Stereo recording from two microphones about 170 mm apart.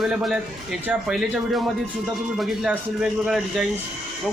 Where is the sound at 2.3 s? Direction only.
Centre (ahead or behind).